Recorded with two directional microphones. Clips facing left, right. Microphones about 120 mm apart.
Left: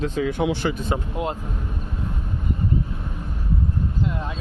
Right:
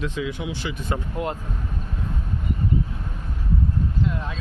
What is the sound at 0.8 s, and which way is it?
Speech, 20° left (ahead or behind).